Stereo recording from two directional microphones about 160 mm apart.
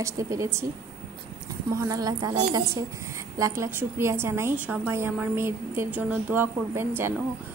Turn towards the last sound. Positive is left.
turn(degrees=-15)  # may be behind; listen again after turning